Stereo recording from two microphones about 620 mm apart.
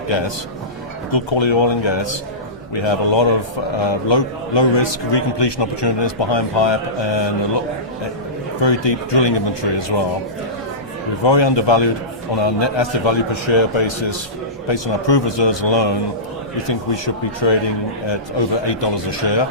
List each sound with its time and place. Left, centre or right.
1.1 s a man's voice: left
8.6 s a man's voice: left
11.2 s a man's voice: left
17.4 s a man's voice: left